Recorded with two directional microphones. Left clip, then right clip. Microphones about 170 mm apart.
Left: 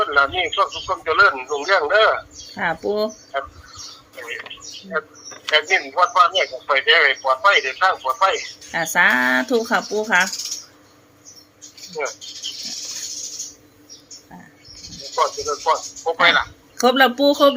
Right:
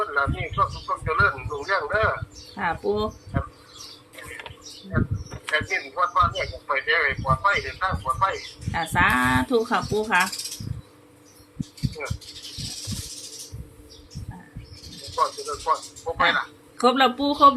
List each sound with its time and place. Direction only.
0.0 s a man's voice: 55° left (ahead or behind)
4.9 s a man's voice: 55° left (ahead or behind)
12.0 s a man's voice: 55° left (ahead or behind)
15.1 s speech: 60° left (ahead or behind)